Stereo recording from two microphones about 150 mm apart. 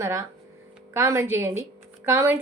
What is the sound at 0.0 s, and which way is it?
A woman's voice, 20° right (ahead or behind).